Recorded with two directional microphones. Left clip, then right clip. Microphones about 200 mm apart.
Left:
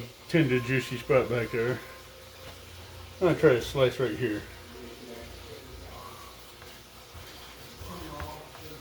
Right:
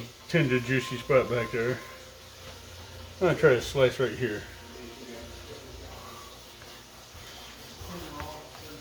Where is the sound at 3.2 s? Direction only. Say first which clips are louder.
Even; 5° left (ahead or behind).